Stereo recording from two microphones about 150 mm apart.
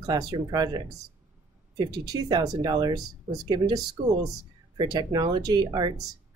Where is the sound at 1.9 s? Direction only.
25° right (ahead or behind).